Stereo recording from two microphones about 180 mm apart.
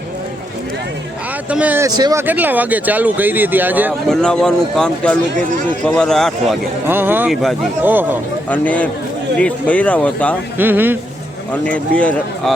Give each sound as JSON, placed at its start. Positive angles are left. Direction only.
{"t": 1.5, "sound": "speech", "side_deg": -10}
{"t": 2.0, "sound": "speech", "side_deg": -20}
{"t": 2.2, "sound": "speech", "side_deg": -10}
{"t": 4.1, "sound": "a man's voice", "side_deg": 5}
{"t": 6.8, "sound": "speech", "side_deg": -10}
{"t": 8.4, "sound": "speech", "side_deg": 10}
{"t": 10.6, "sound": "speech", "side_deg": -10}
{"t": 11.5, "sound": "speech", "side_deg": 5}